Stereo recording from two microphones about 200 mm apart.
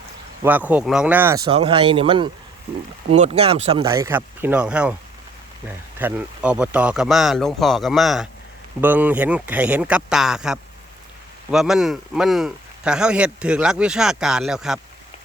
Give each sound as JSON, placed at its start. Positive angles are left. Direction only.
{"t": 0.4, "sound": "speech", "side_deg": -10}
{"t": 1.5, "sound": "speech", "side_deg": -30}
{"t": 3.8, "sound": "speech", "side_deg": -15}